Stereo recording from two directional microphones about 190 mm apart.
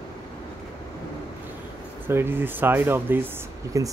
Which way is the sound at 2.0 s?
10° right (ahead or behind).